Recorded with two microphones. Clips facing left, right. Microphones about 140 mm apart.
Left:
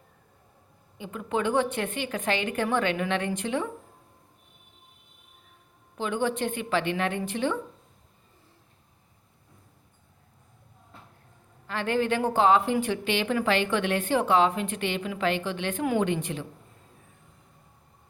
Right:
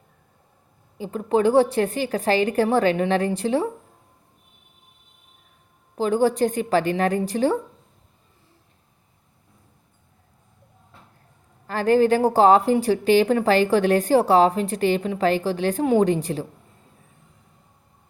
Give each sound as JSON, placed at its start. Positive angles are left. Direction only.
{"t": 0.9, "sound": "a woman's voice", "side_deg": -35}
{"t": 6.0, "sound": "a woman's voice", "side_deg": -35}
{"t": 11.6, "sound": "a woman's voice", "side_deg": -40}